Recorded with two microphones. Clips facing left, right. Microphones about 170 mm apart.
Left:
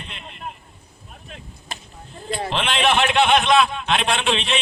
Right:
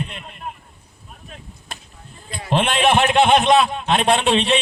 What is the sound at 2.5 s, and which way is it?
A man's voice, 50° right (ahead or behind).